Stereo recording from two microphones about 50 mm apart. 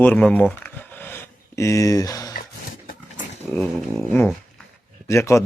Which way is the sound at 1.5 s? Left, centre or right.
Left.